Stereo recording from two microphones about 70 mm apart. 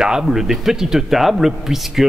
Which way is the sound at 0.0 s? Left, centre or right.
Centre.